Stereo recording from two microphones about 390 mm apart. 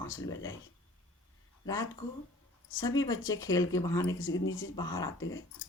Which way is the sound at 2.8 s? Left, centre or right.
Centre.